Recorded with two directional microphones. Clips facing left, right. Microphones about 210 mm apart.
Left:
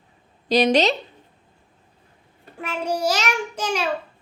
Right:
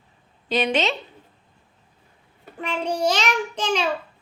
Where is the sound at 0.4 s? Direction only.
40° left (ahead or behind).